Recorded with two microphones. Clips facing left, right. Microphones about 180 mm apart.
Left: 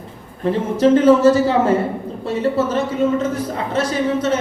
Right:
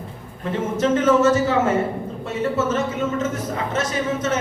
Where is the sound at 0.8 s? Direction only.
35° left (ahead or behind).